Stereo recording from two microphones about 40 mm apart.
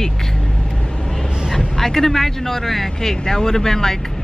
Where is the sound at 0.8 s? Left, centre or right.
Centre.